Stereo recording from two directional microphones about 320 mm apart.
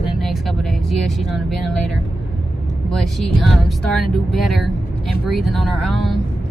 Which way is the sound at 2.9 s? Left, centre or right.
Centre.